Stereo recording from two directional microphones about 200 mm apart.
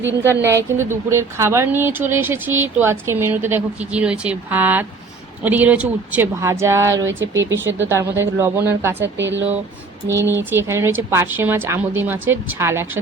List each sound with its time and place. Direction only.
0.0 s speech: 10° right (ahead or behind)
9.1 s speech: 65° right (ahead or behind)
10.1 s speech: 10° right (ahead or behind)